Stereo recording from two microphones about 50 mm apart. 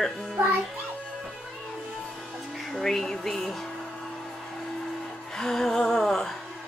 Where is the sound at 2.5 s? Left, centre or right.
Centre.